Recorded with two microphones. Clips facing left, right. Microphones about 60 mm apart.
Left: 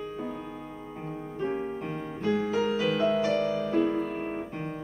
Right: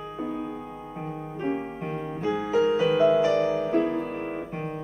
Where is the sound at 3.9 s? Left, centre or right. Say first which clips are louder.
Right 1 dB; centre.